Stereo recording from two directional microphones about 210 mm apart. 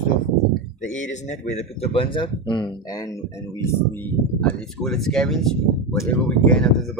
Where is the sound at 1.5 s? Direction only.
25° left (ahead or behind).